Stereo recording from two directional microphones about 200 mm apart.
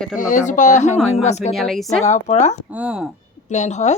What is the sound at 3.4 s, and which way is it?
Speech, 35° left (ahead or behind).